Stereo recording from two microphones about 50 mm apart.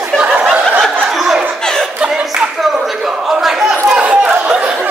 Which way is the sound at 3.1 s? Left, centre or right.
Centre.